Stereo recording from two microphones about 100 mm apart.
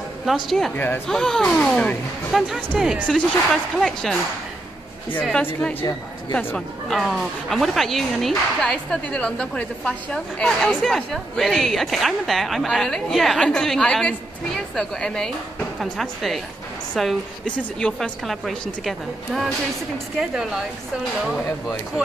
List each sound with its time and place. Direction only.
0.2 s speech: centre (ahead or behind)
0.7 s a woman's voice: 20° left (ahead or behind)
1.0 s speech: 5° left (ahead or behind)
2.3 s speech: centre (ahead or behind)
5.4 s a woman's voice: 20° left (ahead or behind)
7.0 s a woman's voice: centre (ahead or behind)